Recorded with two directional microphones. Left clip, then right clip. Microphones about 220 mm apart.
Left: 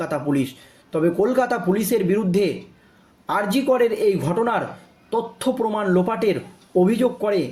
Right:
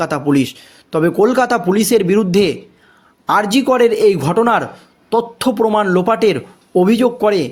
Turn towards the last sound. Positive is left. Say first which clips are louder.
# right 7 dB
turn(degrees=-45)  # may be behind; listen again after turning